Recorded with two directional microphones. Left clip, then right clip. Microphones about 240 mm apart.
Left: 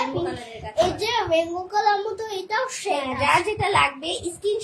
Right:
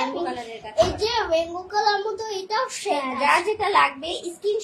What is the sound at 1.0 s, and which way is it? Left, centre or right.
A child's voice, centre.